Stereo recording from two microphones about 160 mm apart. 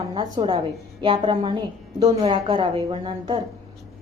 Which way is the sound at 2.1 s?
35° right (ahead or behind).